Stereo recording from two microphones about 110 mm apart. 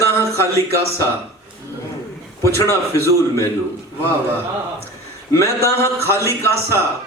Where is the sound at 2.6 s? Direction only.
25° left (ahead or behind).